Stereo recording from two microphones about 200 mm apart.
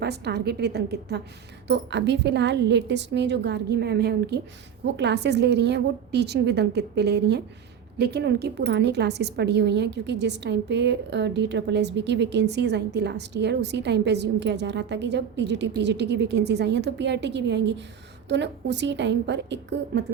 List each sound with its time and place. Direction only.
0.0 s a woman's voice: 55° right (ahead or behind)